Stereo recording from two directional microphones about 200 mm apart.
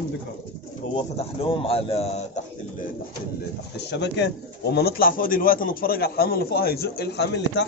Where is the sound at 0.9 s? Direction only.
30° left (ahead or behind).